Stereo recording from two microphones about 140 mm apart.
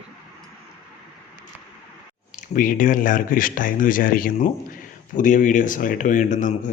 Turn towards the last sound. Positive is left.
turn(degrees=60)  # may be behind; listen again after turning